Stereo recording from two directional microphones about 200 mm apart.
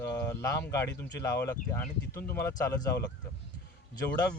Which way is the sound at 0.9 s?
10° left (ahead or behind).